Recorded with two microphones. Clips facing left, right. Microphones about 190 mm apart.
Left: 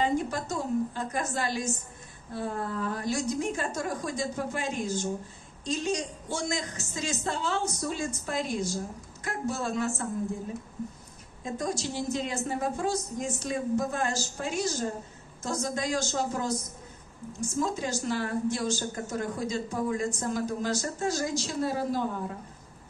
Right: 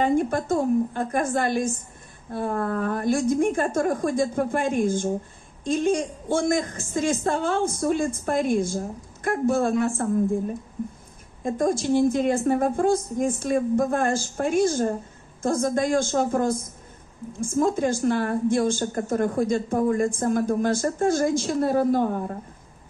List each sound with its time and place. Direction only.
0.0 s a woman's voice: 55° right (ahead or behind)
11.4 s a woman's voice: 50° right (ahead or behind)